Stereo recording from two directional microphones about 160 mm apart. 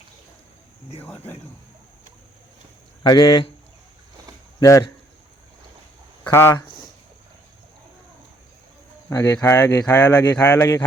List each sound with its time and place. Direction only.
3.0 s speech: 25° left (ahead or behind)
4.6 s speech: 20° left (ahead or behind)
6.3 s speech: 15° left (ahead or behind)
9.0 s speech: 20° left (ahead or behind)